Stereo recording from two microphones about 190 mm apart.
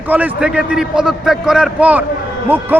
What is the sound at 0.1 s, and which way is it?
A man's voice, 10° right (ahead or behind).